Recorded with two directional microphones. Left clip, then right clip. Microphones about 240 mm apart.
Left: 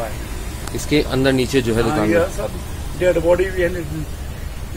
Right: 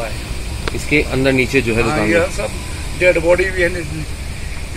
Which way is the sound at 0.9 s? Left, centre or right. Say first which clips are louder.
Right 2 dB; centre.